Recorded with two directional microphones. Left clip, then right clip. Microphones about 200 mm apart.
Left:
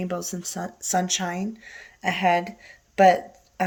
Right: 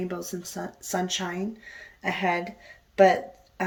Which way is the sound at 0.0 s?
55° left (ahead or behind).